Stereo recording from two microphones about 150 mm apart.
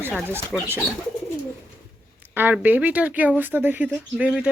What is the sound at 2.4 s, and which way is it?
Speech, 10° right (ahead or behind).